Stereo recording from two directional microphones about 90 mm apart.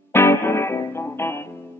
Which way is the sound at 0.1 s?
25° left (ahead or behind).